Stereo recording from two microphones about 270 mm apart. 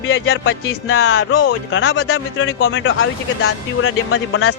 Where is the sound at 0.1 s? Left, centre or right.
Left.